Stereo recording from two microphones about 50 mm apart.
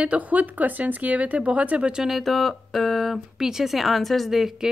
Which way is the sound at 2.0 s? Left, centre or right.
Centre.